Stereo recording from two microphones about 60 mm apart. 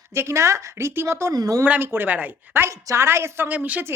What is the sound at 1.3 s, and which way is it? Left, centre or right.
Speech, right.